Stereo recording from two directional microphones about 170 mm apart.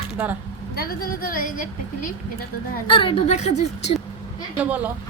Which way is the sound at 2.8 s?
30° left (ahead or behind).